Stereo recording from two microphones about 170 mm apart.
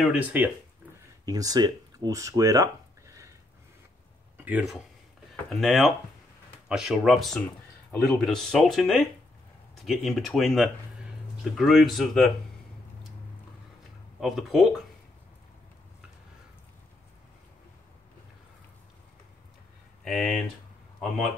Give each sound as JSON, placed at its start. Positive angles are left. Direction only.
{"t": 0.0, "sound": "speech", "side_deg": -10}
{"t": 1.2, "sound": "speech", "side_deg": -20}
{"t": 4.4, "sound": "speech", "side_deg": -10}
{"t": 14.2, "sound": "speech", "side_deg": 0}
{"t": 20.1, "sound": "speech", "side_deg": 0}